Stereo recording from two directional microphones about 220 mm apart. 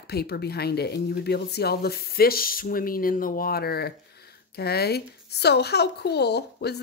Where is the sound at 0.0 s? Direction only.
45° left (ahead or behind).